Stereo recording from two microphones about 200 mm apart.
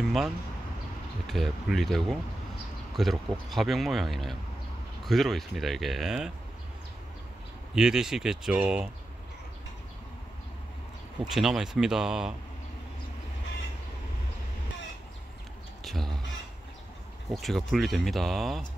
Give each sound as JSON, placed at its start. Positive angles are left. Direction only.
{"t": 1.2, "sound": "speech", "side_deg": 0}
{"t": 7.7, "sound": "speech", "side_deg": -5}
{"t": 11.3, "sound": "speech", "side_deg": 0}
{"t": 15.8, "sound": "crow", "side_deg": 0}
{"t": 17.3, "sound": "speech", "side_deg": 0}